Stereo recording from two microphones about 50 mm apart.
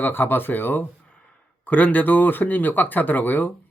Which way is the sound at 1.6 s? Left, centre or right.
Left.